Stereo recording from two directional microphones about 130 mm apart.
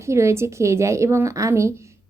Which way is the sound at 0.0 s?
20° right (ahead or behind).